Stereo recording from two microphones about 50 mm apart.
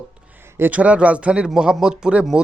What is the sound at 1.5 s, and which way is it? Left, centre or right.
Speech, centre.